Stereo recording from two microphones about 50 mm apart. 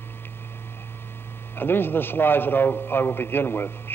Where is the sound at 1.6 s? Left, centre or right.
Left.